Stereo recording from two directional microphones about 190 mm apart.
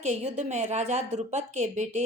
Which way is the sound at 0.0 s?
35° right (ahead or behind).